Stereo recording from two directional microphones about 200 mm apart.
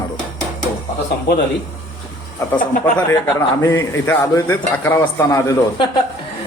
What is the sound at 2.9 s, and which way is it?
A man's voice, 15° left (ahead or behind).